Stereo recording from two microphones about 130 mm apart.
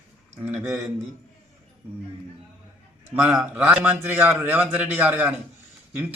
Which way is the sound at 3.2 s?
5° right (ahead or behind).